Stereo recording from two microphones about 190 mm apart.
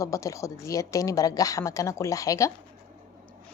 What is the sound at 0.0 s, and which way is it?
Speech, 15° left (ahead or behind).